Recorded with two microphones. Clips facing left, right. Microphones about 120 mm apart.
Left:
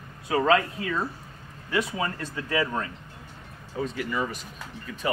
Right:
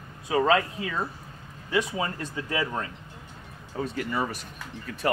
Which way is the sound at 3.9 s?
35° right (ahead or behind).